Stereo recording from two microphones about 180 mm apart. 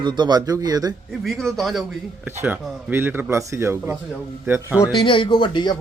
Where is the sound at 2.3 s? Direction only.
10° right (ahead or behind).